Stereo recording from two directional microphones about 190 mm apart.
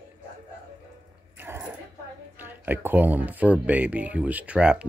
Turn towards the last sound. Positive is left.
turn(degrees=-5)  # may be behind; listen again after turning